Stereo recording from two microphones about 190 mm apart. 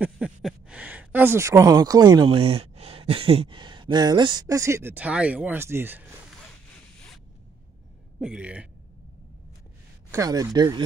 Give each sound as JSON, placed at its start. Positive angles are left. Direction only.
{"t": 0.0, "sound": "speech", "side_deg": -5}
{"t": 8.2, "sound": "speech", "side_deg": -5}
{"t": 10.1, "sound": "speech", "side_deg": -15}